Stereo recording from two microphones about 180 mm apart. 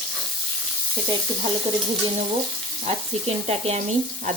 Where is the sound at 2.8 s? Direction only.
35° right (ahead or behind).